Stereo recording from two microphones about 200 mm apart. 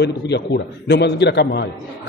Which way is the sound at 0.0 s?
55° left (ahead or behind).